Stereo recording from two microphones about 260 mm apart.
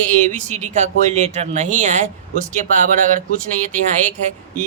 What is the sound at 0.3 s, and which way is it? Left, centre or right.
Speech, right.